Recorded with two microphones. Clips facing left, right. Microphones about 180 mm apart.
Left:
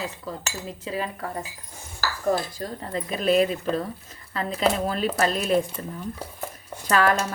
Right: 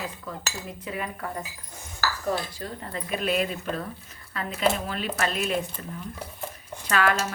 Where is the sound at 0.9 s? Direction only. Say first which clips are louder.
Left 3 dB; 30° left (ahead or behind).